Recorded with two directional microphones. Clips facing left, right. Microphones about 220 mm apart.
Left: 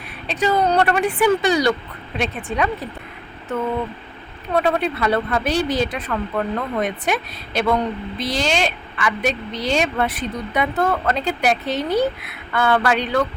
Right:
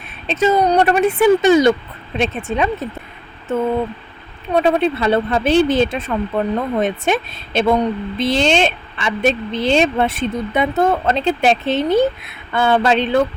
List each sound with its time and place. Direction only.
0.3 s a woman's voice: 20° right (ahead or behind)
4.5 s a woman's voice: 25° right (ahead or behind)